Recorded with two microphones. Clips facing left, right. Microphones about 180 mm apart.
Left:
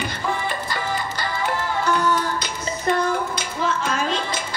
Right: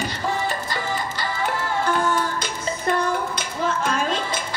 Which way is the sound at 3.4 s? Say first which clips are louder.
Even; 50° right (ahead or behind).